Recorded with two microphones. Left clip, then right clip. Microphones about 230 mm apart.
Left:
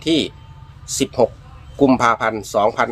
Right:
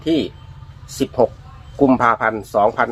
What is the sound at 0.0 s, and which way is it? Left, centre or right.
Speech, centre.